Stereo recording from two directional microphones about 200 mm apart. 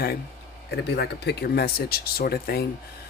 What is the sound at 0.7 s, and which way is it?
Speech, 55° left (ahead or behind).